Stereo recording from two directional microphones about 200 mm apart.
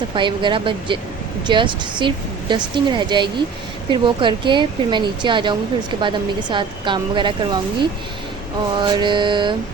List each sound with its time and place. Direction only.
0.1 s a woman's voice: 25° right (ahead or behind)